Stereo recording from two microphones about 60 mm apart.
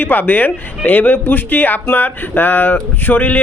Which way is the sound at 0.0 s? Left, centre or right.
Left.